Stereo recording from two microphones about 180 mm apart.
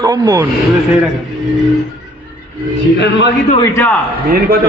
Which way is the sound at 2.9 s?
75° left (ahead or behind).